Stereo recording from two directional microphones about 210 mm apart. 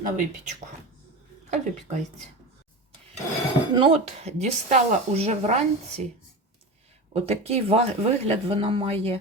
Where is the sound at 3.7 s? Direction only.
25° right (ahead or behind).